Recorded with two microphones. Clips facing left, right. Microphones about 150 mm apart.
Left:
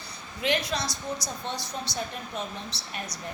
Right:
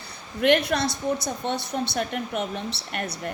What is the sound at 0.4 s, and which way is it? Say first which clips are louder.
A woman's voice: right 7 dB; 60° right (ahead or behind).